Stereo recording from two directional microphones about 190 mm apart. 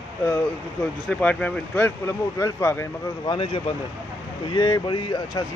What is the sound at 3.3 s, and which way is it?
Speech, 25° left (ahead or behind).